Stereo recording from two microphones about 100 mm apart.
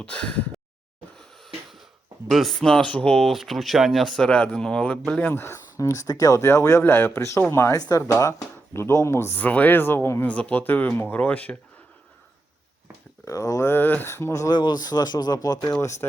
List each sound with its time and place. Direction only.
0.0 s speech: 10° left (ahead or behind)
2.3 s speech: 5° left (ahead or behind)
5.3 s speech: 25° left (ahead or behind)
7.8 s speech: 40° left (ahead or behind); by 11.5 s 15° left (ahead or behind)
13.2 s speech: 35° left (ahead or behind)
14.5 s speech: 45° left (ahead or behind)